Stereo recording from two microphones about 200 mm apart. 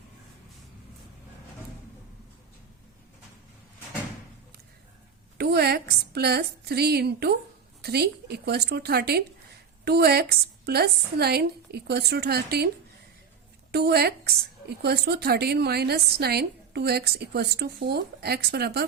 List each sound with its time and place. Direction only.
5.4 s a woman's voice: 55° right (ahead or behind)